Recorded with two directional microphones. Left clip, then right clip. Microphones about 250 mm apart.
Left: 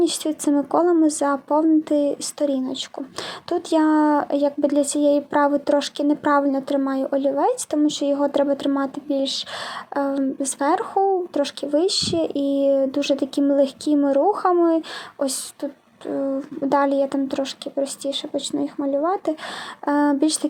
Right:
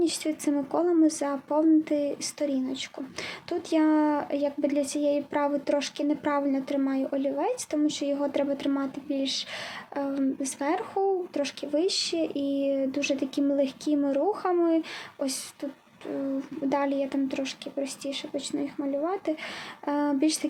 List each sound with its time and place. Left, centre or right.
0.0 s speech: centre
16.6 s speech: centre